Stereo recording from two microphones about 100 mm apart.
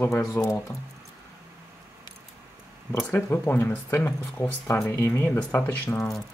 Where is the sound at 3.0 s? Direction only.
20° left (ahead or behind).